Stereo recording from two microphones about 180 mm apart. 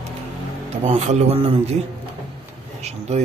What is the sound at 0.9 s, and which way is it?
Speech, 40° right (ahead or behind).